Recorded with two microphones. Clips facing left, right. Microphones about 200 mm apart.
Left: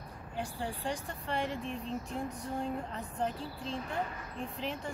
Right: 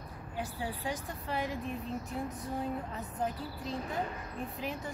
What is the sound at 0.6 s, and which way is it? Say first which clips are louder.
Speech: left 1 dB; 5° right (ahead or behind).